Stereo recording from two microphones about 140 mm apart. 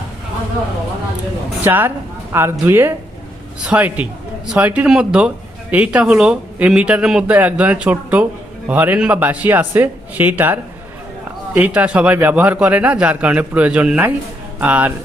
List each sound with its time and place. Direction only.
1.6 s speech: 15° right (ahead or behind)
11.6 s speech: 10° right (ahead or behind)